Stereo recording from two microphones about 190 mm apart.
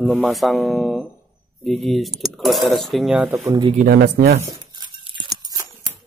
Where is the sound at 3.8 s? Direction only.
55° right (ahead or behind).